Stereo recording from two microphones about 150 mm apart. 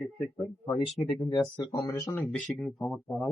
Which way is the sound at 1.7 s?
25° left (ahead or behind).